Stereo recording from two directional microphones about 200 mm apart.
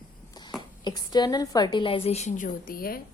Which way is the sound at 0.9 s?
20° left (ahead or behind).